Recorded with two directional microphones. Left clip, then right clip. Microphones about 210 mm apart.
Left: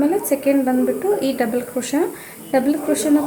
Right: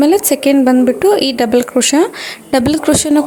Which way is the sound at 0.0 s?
45° right (ahead or behind).